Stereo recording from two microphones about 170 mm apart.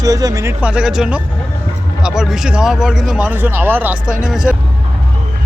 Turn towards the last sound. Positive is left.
turn(degrees=-5)  # may be behind; listen again after turning